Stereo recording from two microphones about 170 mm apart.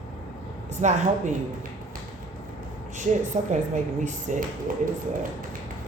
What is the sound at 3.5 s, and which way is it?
Speech, 45° right (ahead or behind).